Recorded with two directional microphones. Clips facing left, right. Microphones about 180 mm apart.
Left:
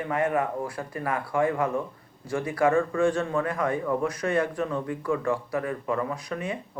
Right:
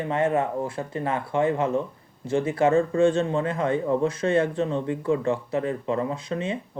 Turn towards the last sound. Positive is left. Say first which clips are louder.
# right 3 dB
turn(degrees=-25)  # may be behind; listen again after turning